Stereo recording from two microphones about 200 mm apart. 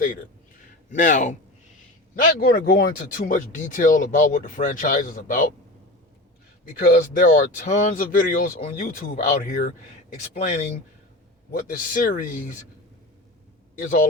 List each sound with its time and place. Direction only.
0.9 s speech: 40° left (ahead or behind)
6.7 s speech: 45° left (ahead or behind)
13.7 s speech: 40° left (ahead or behind)